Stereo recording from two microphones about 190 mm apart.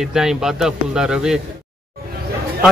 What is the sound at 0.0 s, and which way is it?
Speech, 5° right (ahead or behind).